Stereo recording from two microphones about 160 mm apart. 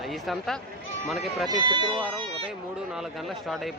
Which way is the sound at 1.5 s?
25° right (ahead or behind).